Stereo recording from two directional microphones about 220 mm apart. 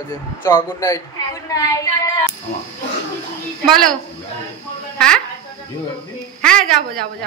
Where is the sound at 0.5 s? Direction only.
15° left (ahead or behind).